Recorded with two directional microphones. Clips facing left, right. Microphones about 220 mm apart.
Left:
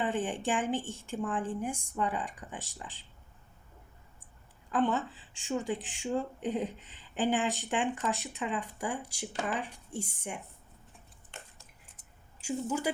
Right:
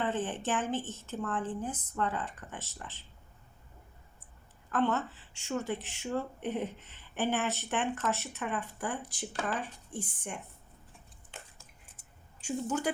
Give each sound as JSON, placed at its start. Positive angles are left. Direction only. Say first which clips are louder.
{"t": 0.0, "sound": "a woman's voice", "louder": "left 1 dB", "side_deg": 15}
{"t": 4.7, "sound": "a woman's voice", "louder": "left 1 dB", "side_deg": 15}
{"t": 11.3, "sound": "squish", "louder": "even", "side_deg": -5}